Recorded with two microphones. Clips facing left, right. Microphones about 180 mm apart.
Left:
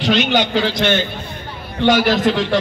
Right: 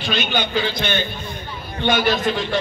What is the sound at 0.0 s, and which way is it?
A man's voice, 80° left.